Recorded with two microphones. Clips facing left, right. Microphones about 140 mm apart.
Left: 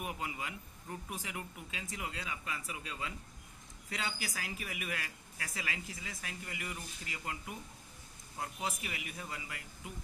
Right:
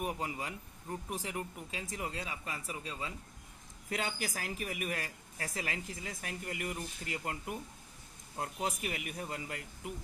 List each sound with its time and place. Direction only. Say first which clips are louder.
0.0 s speech: right 3 dB; 40° right (ahead or behind)
3.8 s speech: right 4 dB; 50° right (ahead or behind)